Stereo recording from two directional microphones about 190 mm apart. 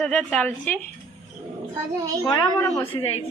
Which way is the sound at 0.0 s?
5° left (ahead or behind).